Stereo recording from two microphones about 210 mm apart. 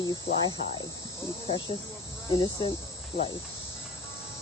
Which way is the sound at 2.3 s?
20° left (ahead or behind).